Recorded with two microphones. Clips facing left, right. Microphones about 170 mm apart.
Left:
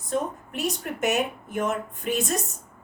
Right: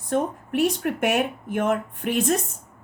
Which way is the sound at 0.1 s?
55° right (ahead or behind).